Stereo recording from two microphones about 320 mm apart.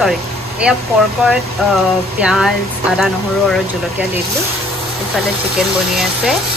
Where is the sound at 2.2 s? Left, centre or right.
Centre.